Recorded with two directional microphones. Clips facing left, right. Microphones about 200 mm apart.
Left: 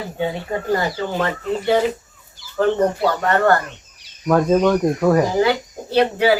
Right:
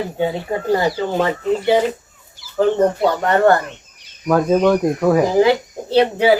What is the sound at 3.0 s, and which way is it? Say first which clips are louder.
Speech: right 3 dB; 15° right (ahead or behind).